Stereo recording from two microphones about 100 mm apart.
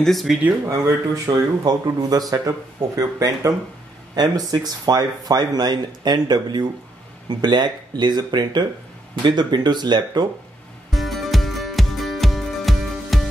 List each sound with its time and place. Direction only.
0.0 s speech: centre (ahead or behind)
0.7 s speech: 30° right (ahead or behind); by 10.2 s 45° right (ahead or behind)
10.9 s music: centre (ahead or behind)